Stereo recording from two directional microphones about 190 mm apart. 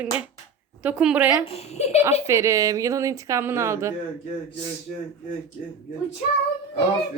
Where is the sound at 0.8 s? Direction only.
5° right (ahead or behind).